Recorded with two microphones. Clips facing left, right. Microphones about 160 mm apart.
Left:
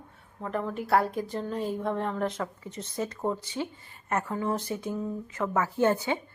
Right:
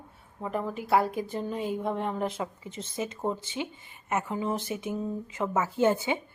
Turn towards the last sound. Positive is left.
turn(degrees=-20)  # may be behind; listen again after turning